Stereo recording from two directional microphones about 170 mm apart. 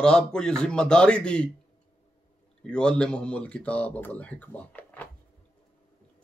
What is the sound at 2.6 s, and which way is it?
Speech, 5° left (ahead or behind).